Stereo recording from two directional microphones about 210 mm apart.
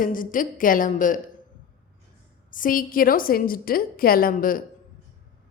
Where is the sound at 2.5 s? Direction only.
40° left (ahead or behind).